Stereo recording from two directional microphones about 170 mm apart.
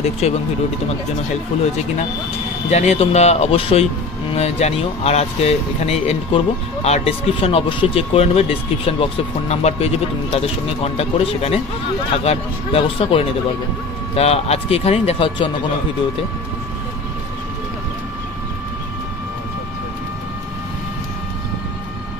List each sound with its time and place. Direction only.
0.2 s speech: 40° left (ahead or behind)
2.7 s speech: 40° left (ahead or behind)